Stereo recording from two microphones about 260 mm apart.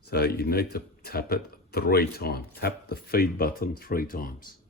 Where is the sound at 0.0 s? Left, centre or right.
Left.